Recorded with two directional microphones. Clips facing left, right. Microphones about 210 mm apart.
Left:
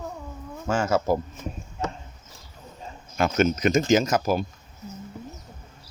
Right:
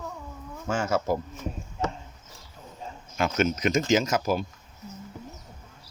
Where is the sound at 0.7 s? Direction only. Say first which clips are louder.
Left 3 dB; 35° left (ahead or behind).